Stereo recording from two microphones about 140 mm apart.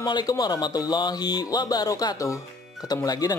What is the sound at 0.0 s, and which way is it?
Speech, 30° left (ahead or behind).